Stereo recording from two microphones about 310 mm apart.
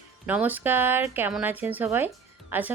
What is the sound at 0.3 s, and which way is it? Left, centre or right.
Speech, centre.